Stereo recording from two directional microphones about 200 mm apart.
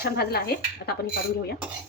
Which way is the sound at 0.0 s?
50° left (ahead or behind).